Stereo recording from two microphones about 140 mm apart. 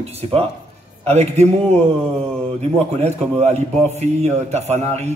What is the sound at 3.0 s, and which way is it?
A man's voice, 55° right (ahead or behind).